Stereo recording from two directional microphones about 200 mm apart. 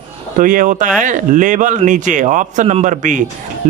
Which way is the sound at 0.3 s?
40° right (ahead or behind).